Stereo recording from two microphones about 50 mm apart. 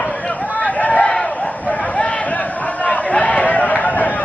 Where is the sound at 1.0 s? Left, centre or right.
Centre.